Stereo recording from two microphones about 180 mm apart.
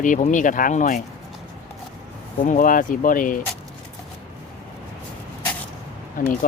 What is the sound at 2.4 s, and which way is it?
Speech, 50° left (ahead or behind).